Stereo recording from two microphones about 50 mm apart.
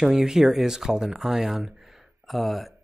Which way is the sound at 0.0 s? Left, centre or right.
Centre.